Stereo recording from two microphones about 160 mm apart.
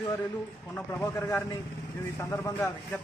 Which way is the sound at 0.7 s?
10° left (ahead or behind).